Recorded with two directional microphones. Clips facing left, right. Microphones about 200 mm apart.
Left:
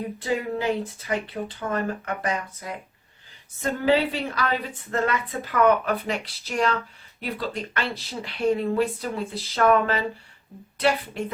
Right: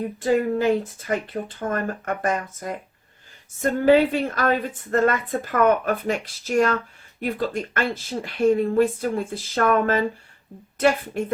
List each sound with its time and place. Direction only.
0.2 s a woman's voice: 45° right (ahead or behind)